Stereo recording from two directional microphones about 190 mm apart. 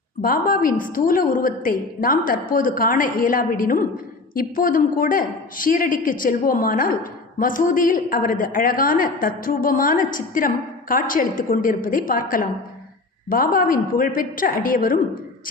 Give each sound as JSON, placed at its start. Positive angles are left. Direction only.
{"t": 0.2, "sound": "a man's voice", "side_deg": 50}